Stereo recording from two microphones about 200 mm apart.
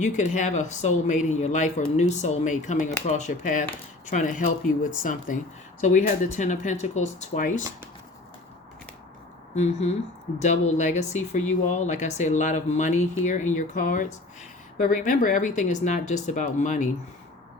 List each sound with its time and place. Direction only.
0.0 s speech: 35° left (ahead or behind)
9.6 s speech: 35° left (ahead or behind)